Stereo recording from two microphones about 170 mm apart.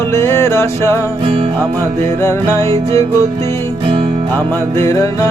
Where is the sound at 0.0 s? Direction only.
15° left (ahead or behind).